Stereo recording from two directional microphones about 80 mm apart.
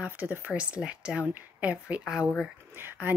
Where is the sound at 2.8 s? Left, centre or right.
Right.